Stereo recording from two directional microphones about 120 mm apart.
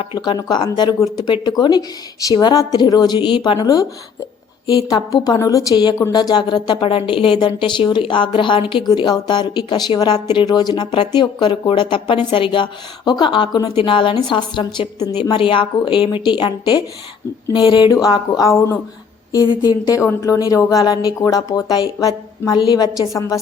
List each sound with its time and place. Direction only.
0.0 s a woman's voice: 45° left (ahead or behind)
0.3 s a woman's voice: 30° left (ahead or behind)
4.9 s a woman's voice: 30° left (ahead or behind)